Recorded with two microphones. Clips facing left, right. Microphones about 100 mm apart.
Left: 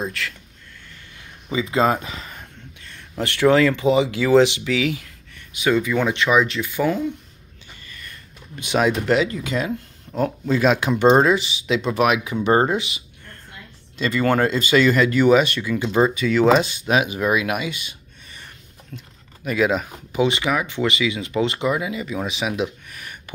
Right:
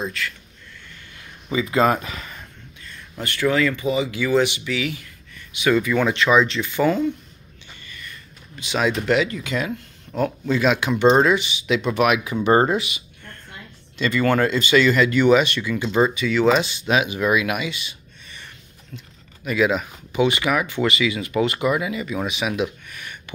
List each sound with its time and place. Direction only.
0.2 s speech: 70° left (ahead or behind)
1.5 s speech: 20° left (ahead or behind)
2.8 s speech: 75° left (ahead or behind)
5.7 s speech: 20° left (ahead or behind)
9.0 s speech: 35° left (ahead or behind)
12.4 s speech: 10° left (ahead or behind)
12.7 s speech: 30° left (ahead or behind)
15.8 s speech: 25° left (ahead or behind)
16.2 s speech: 40° left (ahead or behind)
20.2 s speech: 25° left (ahead or behind); by 23.3 s 40° left (ahead or behind)